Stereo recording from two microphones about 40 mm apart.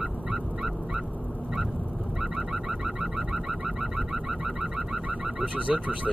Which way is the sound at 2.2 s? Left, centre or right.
Centre.